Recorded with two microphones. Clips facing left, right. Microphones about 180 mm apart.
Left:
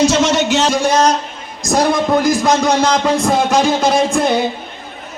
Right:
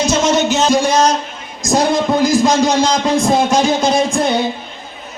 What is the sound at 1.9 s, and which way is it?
Speech, 60° left (ahead or behind).